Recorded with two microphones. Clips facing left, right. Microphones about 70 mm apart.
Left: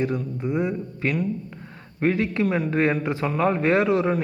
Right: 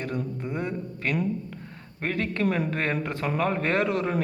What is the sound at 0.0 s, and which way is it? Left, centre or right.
Speech, centre.